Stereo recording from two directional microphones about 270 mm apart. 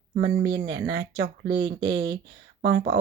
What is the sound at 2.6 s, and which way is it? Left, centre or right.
Speech, right.